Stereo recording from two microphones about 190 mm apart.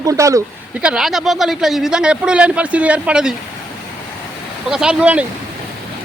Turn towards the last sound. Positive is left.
turn(degrees=-5)  # may be behind; listen again after turning